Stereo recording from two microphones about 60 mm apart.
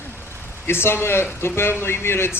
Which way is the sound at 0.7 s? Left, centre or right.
Left.